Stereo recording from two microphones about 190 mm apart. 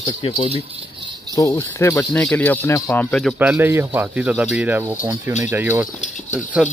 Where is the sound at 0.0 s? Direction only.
20° left (ahead or behind); by 3.3 s 5° left (ahead or behind).